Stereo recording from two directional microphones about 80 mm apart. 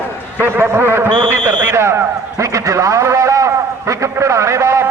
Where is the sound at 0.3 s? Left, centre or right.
Right.